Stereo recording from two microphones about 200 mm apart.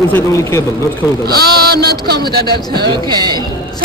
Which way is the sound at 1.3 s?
55° right (ahead or behind).